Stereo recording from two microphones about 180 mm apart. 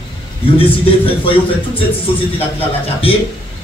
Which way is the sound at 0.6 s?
30° left (ahead or behind).